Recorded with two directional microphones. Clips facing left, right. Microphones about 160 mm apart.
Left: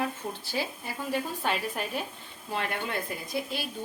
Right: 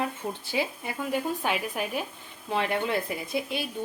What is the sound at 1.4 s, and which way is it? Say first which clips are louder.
Speech: right 1 dB; 10° right (ahead or behind).